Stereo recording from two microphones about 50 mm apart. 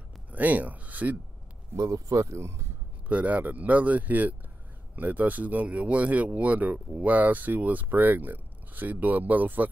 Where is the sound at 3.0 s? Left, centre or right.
Right.